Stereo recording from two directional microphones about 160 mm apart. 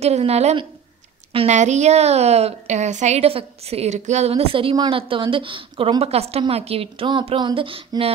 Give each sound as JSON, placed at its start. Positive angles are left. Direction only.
{"t": 0.0, "sound": "a woman's voice", "side_deg": -40}